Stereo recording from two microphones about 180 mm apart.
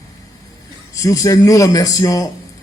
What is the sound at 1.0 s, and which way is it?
A man's voice, 20° left (ahead or behind).